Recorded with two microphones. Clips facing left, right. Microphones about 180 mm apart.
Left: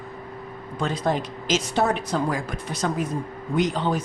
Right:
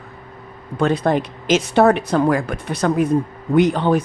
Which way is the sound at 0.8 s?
60° right (ahead or behind).